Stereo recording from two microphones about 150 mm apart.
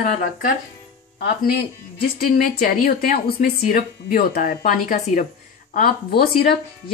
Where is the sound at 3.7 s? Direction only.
65° left (ahead or behind).